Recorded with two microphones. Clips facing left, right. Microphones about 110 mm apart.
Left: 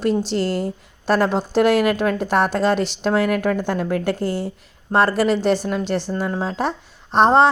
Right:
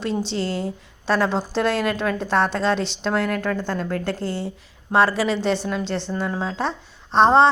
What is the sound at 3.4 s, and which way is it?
Speech, 15° left (ahead or behind).